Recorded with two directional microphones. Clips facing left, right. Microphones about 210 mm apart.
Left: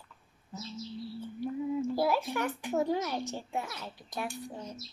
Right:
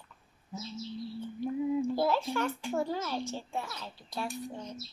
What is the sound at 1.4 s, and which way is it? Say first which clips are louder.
A child's voice: right 2 dB; 10° left (ahead or behind).